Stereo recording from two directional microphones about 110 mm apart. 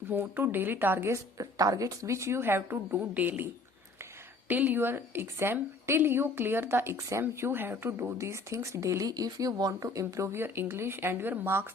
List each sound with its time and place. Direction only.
0.1 s a woman's voice: 20° right (ahead or behind)